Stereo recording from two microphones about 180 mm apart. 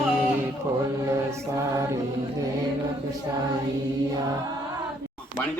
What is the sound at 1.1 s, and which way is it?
Mantra, 15° right (ahead or behind).